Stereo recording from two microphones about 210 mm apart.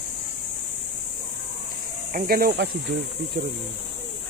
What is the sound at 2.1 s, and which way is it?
Speech, 45° right (ahead or behind).